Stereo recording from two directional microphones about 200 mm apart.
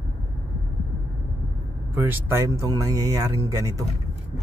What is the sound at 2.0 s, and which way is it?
Speech, 10° right (ahead or behind).